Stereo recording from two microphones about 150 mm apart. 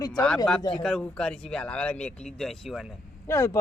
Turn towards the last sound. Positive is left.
turn(degrees=20)  # may be behind; listen again after turning